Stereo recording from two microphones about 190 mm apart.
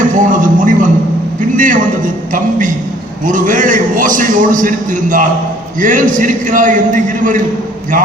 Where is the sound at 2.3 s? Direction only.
40° right (ahead or behind).